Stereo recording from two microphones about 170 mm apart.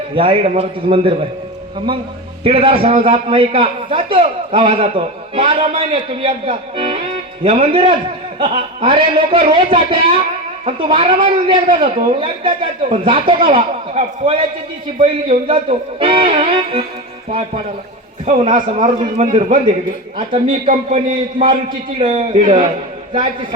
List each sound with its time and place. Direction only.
0.1 s a man's voice: 30° right (ahead or behind)
2.4 s a man's voice: 35° right (ahead or behind)
18.3 s a man's voice: 50° right (ahead or behind)
20.1 s a man's voice: 35° right (ahead or behind)